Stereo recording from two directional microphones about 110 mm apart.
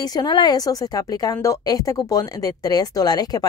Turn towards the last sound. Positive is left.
turn(degrees=35)  # may be behind; listen again after turning